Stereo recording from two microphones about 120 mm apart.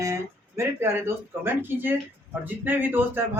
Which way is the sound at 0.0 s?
25° right (ahead or behind).